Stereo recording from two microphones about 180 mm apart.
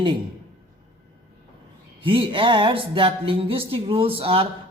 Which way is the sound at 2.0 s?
30° right (ahead or behind).